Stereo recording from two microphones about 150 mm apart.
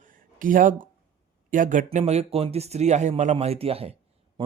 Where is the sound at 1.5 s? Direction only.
60° right (ahead or behind).